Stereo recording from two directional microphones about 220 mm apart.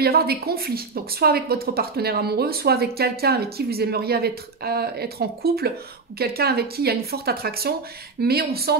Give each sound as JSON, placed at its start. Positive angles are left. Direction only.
{"t": 0.0, "sound": "a woman's voice", "side_deg": -45}